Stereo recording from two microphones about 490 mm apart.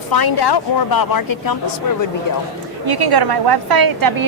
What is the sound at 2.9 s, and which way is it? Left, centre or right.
A woman's voice, right.